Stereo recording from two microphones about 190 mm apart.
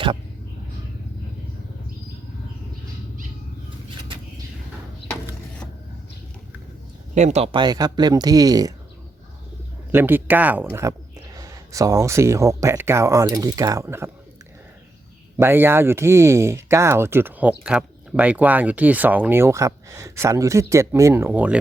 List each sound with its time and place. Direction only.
7.1 s speech: 40° right (ahead or behind); by 8.7 s 20° right (ahead or behind)
9.9 s speech: 10° right (ahead or behind)
15.4 s speech: 10° right (ahead or behind)